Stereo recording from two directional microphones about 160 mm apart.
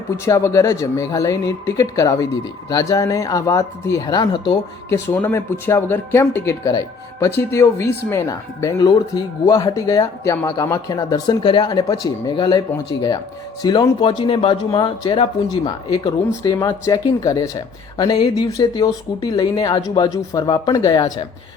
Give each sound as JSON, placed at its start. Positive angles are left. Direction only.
{"t": 0.3, "sound": "speech", "side_deg": 20}
{"t": 5.0, "sound": "speech", "side_deg": 10}